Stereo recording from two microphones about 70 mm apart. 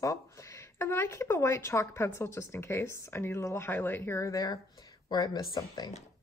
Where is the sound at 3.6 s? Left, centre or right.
Left.